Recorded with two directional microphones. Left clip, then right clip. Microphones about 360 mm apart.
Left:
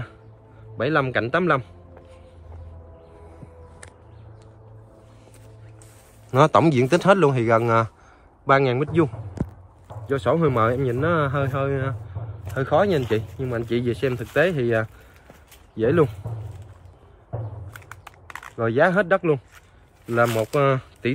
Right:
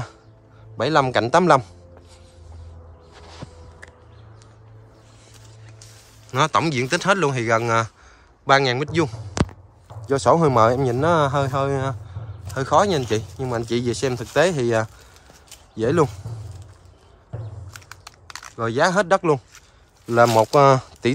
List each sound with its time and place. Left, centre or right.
0.7 s speech: centre
6.3 s speech: centre
10.0 s speech: centre
18.6 s speech: centre